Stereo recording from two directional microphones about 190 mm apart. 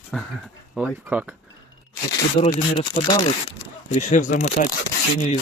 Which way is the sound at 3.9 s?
40° left (ahead or behind).